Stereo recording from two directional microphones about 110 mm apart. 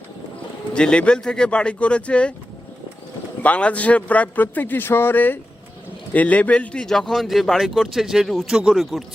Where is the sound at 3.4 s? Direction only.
10° left (ahead or behind).